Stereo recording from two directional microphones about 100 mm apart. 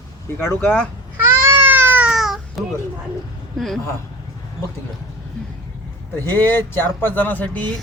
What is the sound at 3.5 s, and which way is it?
Speech, centre (ahead or behind).